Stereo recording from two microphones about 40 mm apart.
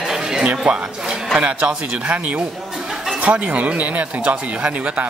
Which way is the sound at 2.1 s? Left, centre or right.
Right.